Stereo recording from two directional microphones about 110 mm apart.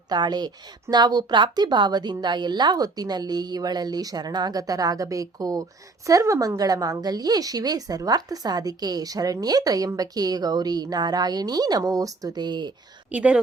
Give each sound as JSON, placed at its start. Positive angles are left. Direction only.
{"t": 0.1, "sound": "a woman's voice", "side_deg": -40}
{"t": 13.1, "sound": "speech", "side_deg": -10}